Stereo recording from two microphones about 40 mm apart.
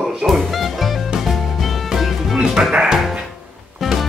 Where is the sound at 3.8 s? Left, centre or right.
Centre.